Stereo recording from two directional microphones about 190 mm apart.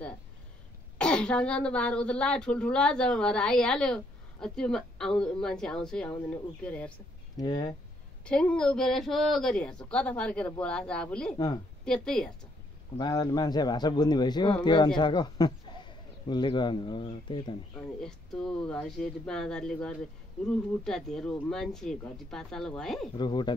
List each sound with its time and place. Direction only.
0.9 s speech: 5° left (ahead or behind)
7.3 s a man's voice: 20° left (ahead or behind)
8.3 s speech: 5° left (ahead or behind)
11.3 s a man's voice: 20° left (ahead or behind)
11.8 s speech: 5° left (ahead or behind)
12.9 s a man's voice: 20° left (ahead or behind)
18.0 s speech: 5° left (ahead or behind)
23.1 s a man's voice: 25° left (ahead or behind)